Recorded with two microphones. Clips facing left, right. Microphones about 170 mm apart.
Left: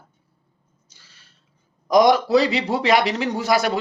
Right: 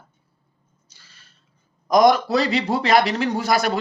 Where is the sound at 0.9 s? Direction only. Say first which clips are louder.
Even; 15° left (ahead or behind).